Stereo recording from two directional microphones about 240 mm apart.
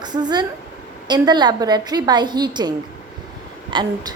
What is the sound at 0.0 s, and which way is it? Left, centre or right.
A woman's voice, centre.